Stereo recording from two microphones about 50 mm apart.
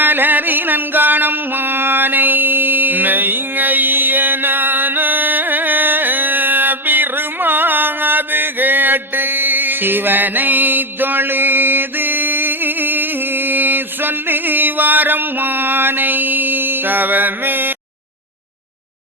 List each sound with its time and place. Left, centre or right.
0.0 s music: right